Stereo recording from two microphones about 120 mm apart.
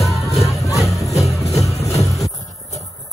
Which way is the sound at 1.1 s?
25° left (ahead or behind).